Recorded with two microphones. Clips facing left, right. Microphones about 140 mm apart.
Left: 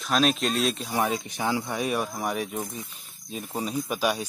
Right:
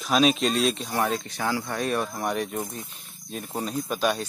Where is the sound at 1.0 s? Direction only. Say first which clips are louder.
Even; 15° left (ahead or behind).